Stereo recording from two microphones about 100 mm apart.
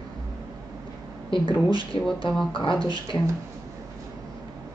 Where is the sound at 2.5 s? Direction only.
60° left (ahead or behind).